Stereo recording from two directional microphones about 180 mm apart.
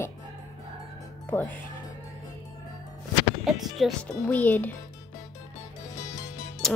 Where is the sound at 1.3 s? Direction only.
10° left (ahead or behind).